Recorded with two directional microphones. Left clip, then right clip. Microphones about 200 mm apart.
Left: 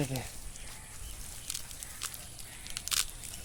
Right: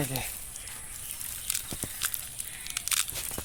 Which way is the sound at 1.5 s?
10° left (ahead or behind).